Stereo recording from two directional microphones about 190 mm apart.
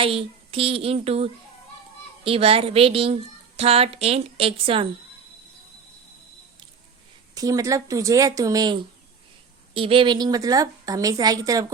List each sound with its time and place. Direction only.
0.0 s speech: 30° right (ahead or behind)
7.3 s a woman's voice: 20° right (ahead or behind)